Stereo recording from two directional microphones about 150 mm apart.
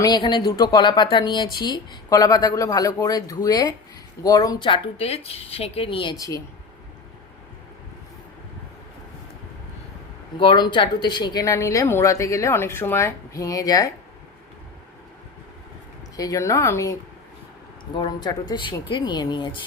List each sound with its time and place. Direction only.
0.0 s speech: 30° left (ahead or behind)
4.7 s speech: 40° left (ahead or behind); by 6.4 s 25° left (ahead or behind)
10.3 s speech: 30° left (ahead or behind)
16.1 s speech: 25° left (ahead or behind)
17.9 s speech: 30° left (ahead or behind)